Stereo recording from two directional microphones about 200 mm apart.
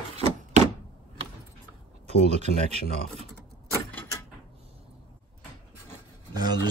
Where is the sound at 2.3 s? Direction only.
35° right (ahead or behind).